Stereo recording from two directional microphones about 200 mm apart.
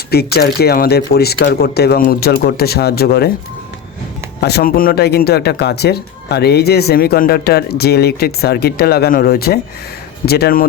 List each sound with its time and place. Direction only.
0.1 s speech: 50° left (ahead or behind)
4.4 s speech: 55° left (ahead or behind)